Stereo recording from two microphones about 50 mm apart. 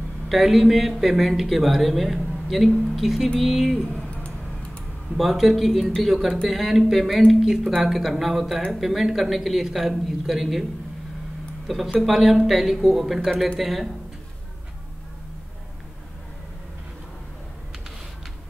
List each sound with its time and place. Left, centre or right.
0.3 s speech: centre
3.9 s a sound: left
5.1 s speech: centre
11.6 s speech: centre